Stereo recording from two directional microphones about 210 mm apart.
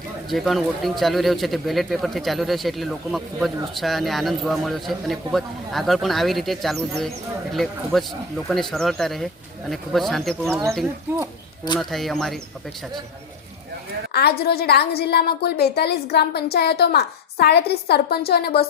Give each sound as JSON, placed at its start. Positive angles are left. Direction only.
{"t": 0.3, "sound": "speech", "side_deg": 0}
{"t": 11.8, "sound": "speech", "side_deg": 0}
{"t": 14.1, "sound": "a woman's voice", "side_deg": 50}